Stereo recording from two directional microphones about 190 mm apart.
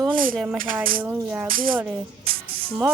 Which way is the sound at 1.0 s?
10° right (ahead or behind).